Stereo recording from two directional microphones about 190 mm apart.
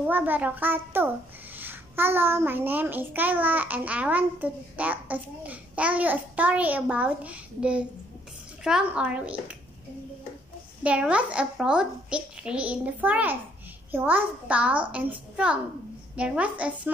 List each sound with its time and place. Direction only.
0.0 s a child's voice: 10° right (ahead or behind)
10.8 s a child's voice: 5° right (ahead or behind)